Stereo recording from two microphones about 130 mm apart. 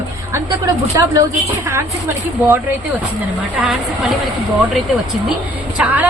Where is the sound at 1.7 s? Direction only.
20° right (ahead or behind).